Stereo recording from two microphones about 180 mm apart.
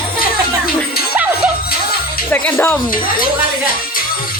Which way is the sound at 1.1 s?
10° right (ahead or behind).